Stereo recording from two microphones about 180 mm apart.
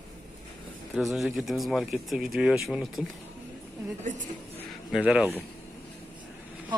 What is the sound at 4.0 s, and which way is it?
Speech, 45° right (ahead or behind).